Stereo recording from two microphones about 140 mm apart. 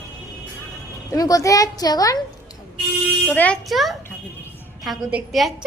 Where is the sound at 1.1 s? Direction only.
25° left (ahead or behind).